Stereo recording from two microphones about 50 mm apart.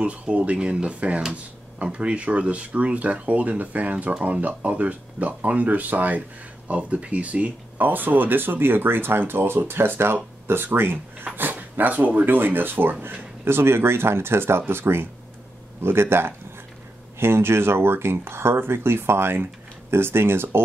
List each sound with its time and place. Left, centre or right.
0.0 s speech: right
7.7 s speech: right
12.3 s speech: right